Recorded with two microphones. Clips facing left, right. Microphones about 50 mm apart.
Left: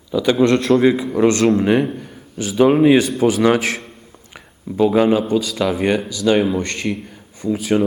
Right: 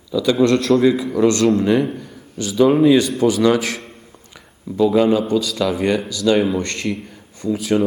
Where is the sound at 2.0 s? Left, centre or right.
Left.